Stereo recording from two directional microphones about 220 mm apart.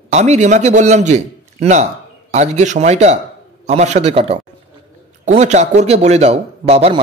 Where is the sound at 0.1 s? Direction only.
30° right (ahead or behind).